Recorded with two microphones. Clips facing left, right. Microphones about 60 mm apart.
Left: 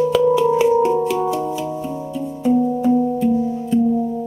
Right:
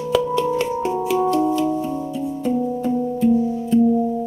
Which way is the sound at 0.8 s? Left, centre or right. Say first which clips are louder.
Left 3 dB; centre.